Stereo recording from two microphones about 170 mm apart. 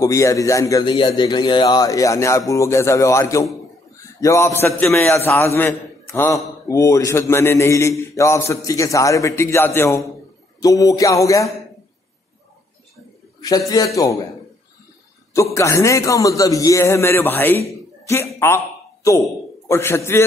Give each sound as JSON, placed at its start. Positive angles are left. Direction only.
{"t": 0.0, "sound": "a man's voice", "side_deg": 20}
{"t": 12.9, "sound": "a sound", "side_deg": 20}
{"t": 13.7, "sound": "a man's voice", "side_deg": 20}
{"t": 15.3, "sound": "a man's voice", "side_deg": 15}